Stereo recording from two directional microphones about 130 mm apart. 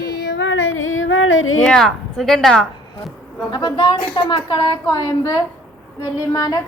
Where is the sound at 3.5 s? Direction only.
35° left (ahead or behind).